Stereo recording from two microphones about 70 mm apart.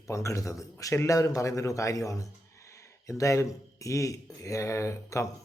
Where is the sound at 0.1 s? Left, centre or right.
Left.